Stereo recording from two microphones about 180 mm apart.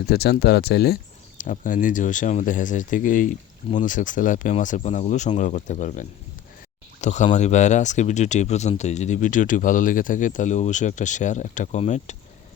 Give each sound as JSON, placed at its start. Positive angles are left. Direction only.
{"t": 0.0, "sound": "speech", "side_deg": 65}
{"t": 1.4, "sound": "speech", "side_deg": 45}